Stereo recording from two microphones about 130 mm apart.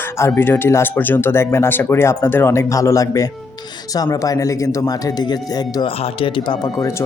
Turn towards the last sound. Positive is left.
turn(degrees=40)  # may be behind; listen again after turning